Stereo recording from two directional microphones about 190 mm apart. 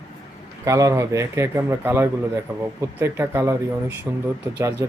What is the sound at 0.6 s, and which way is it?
A man's voice, 15° right (ahead or behind).